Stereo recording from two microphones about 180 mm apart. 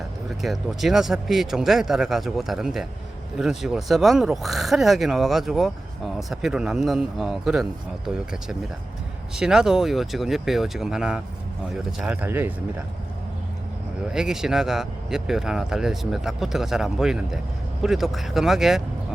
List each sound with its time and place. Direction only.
0.4 s speech: centre (ahead or behind)
14.1 s speech: 5° right (ahead or behind)